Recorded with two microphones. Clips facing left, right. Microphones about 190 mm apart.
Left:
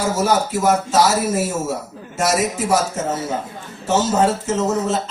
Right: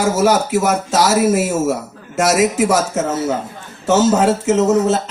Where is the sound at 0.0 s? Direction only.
75° right (ahead or behind).